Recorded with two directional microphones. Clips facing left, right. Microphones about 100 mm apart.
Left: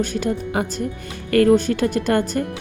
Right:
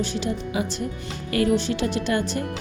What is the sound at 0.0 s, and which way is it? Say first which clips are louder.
A woman's voice: left 4 dB; 50° left (ahead or behind).